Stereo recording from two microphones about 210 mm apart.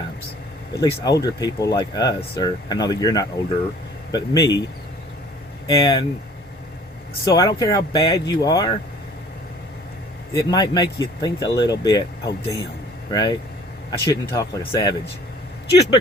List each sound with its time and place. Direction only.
0.7 s speech: 20° left (ahead or behind)
5.6 s speech: 20° left (ahead or behind)
7.3 s speech: 15° left (ahead or behind)
10.3 s speech: 20° left (ahead or behind)